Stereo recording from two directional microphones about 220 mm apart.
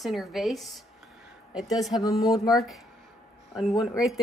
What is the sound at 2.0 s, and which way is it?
Speech, 15° left (ahead or behind).